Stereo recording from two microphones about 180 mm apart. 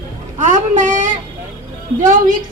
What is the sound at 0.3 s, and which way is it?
A woman's voice, 45° right (ahead or behind).